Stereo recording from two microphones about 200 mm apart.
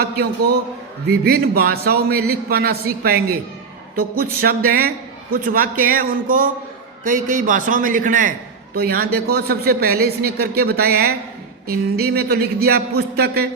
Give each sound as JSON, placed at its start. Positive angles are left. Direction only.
{"t": 0.0, "sound": "a man's voice", "side_deg": -55}
{"t": 4.4, "sound": "a man's voice", "side_deg": -50}